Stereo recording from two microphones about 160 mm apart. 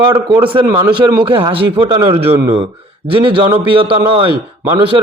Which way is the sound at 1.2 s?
35° right (ahead or behind).